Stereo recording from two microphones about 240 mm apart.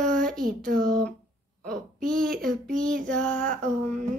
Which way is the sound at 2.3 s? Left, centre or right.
Right.